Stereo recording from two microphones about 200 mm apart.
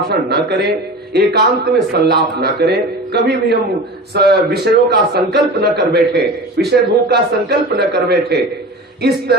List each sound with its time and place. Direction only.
0.1 s a man's voice: 55° right (ahead or behind)